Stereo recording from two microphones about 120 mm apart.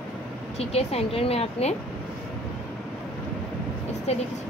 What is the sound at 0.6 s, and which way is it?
A woman's voice, 60° left (ahead or behind).